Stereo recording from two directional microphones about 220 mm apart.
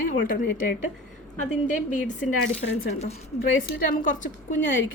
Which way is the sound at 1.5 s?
35° left (ahead or behind).